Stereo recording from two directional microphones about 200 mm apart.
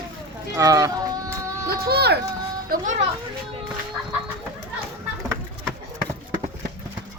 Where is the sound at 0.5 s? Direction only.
15° right (ahead or behind).